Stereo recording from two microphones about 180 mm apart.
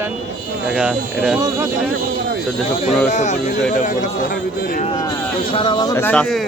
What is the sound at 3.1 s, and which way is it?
Speech, 45° left (ahead or behind).